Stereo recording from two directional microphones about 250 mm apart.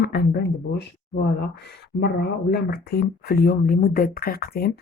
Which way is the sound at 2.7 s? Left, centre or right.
Left.